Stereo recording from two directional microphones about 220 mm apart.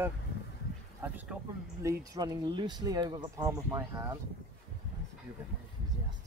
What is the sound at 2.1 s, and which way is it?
Speech, 15° right (ahead or behind).